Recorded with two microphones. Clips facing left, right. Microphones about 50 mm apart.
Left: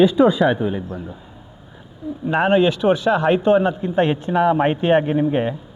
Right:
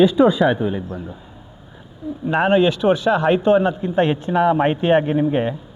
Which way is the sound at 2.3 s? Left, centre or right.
Centre.